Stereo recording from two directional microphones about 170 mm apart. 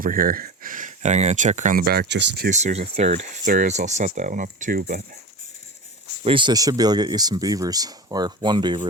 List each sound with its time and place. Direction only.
0.0 s speech: 55° right (ahead or behind)
1.8 s speech: 65° right (ahead or behind); by 2.5 s 80° right
2.5 s speech: 45° right (ahead or behind)
6.2 s speech: 30° right (ahead or behind)